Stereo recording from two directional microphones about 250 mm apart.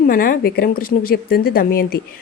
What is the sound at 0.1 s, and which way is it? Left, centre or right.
Speech, left.